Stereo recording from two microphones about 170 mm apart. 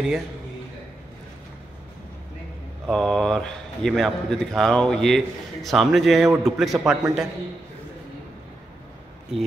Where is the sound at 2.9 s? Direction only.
5° left (ahead or behind).